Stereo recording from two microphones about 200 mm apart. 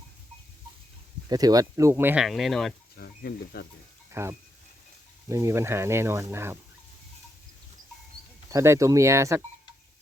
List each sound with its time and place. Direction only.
1.3 s speech: 20° right (ahead or behind); by 2.7 s centre (ahead or behind)
2.9 s speech: 50° left (ahead or behind)
4.1 s speech: 15° right (ahead or behind)
8.4 s speech: 15° right (ahead or behind)